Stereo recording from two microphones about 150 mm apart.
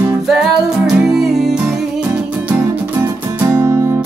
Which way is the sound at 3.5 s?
15° right (ahead or behind).